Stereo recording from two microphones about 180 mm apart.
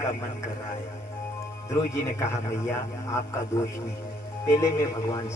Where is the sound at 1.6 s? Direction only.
15° left (ahead or behind).